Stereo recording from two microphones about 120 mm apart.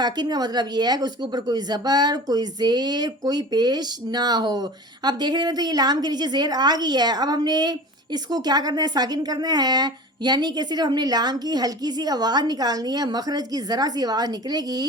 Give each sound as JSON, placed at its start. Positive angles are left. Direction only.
{"t": 0.0, "sound": "speech", "side_deg": -35}